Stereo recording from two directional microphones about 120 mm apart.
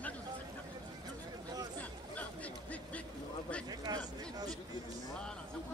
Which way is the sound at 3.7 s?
35° right (ahead or behind).